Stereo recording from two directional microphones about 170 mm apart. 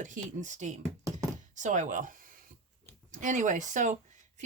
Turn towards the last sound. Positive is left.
turn(degrees=-45)  # may be behind; listen again after turning